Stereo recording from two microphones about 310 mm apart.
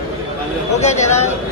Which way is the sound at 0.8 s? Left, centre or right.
Left.